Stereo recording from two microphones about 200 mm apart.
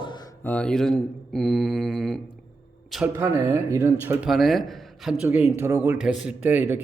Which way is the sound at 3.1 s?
15° right (ahead or behind).